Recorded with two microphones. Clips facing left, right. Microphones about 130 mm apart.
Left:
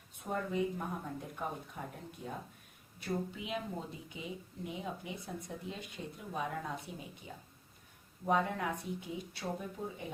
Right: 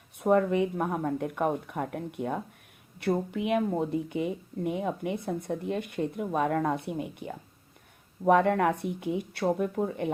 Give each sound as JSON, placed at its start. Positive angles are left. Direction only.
{"t": 0.2, "sound": "speech", "side_deg": -65}